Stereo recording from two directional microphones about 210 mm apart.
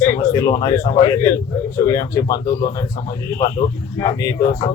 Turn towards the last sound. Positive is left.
turn(degrees=15)  # may be behind; listen again after turning